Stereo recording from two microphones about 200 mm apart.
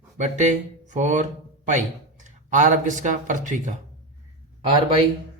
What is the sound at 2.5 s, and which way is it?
Speech, 40° right (ahead or behind).